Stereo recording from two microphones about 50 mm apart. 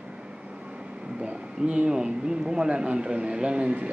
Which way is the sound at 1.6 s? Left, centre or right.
Right.